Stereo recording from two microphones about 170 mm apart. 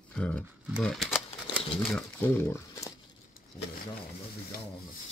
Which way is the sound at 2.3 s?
10° left (ahead or behind).